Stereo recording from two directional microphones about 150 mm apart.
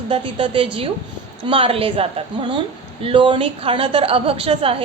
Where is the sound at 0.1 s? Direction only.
40° right (ahead or behind).